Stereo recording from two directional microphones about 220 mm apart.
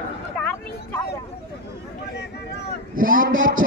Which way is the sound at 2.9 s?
40° right (ahead or behind).